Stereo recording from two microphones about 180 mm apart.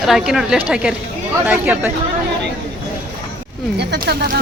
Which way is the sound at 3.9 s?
65° right (ahead or behind).